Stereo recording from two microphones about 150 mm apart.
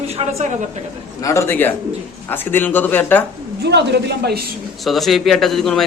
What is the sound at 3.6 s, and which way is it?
Speech, 90° right.